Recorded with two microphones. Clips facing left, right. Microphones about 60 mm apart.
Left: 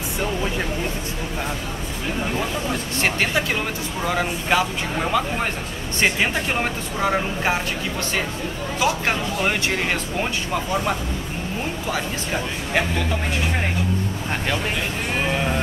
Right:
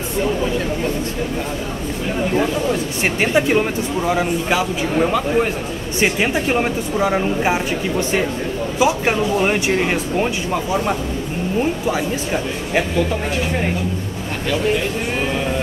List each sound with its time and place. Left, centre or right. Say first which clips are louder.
3.0 s speech: right 3 dB; centre
4.0 s speech: right 3 dB; centre
5.9 s speech: right 3 dB; centre
8.7 s speech: right 5 dB; centre